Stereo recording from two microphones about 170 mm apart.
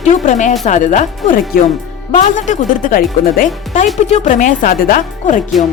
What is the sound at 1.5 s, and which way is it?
Speech, 65° left (ahead or behind).